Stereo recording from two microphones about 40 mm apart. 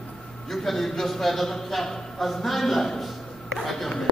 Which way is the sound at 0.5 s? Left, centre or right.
Centre.